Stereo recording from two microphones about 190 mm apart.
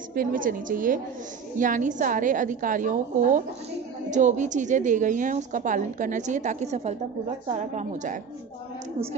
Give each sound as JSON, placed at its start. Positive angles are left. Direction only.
{"t": 0.1, "sound": "a woman's voice", "side_deg": -45}